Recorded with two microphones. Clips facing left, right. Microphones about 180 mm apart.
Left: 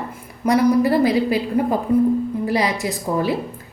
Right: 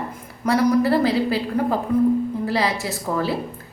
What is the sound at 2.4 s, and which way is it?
Speech, 15° left (ahead or behind).